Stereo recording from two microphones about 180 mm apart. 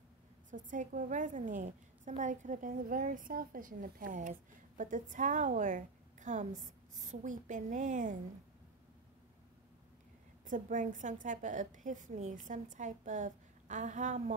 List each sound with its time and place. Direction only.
0.5 s a woman's voice: 45° right (ahead or behind)
10.4 s a woman's voice: 45° right (ahead or behind)